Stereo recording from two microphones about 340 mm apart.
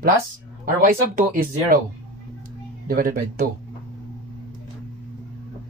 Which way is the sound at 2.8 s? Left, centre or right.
Right.